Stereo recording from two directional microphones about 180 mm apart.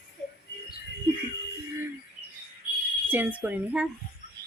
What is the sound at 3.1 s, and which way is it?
Speech, 10° right (ahead or behind).